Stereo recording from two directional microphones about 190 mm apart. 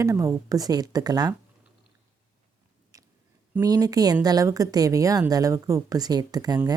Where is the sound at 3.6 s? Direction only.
20° right (ahead or behind).